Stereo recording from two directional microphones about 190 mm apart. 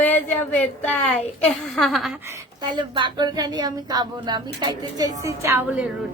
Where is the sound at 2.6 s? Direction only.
25° right (ahead or behind).